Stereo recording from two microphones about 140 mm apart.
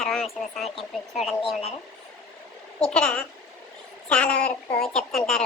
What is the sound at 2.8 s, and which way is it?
A child's voice, 5° left (ahead or behind).